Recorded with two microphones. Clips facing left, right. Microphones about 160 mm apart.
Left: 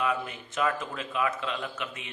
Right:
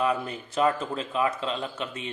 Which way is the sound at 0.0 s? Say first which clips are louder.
Right 3 dB; 35° right (ahead or behind).